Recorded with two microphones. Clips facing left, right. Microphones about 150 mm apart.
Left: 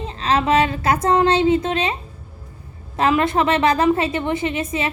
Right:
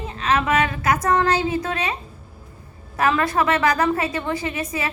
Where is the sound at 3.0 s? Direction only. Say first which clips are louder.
Left 2 dB; 25° left (ahead or behind).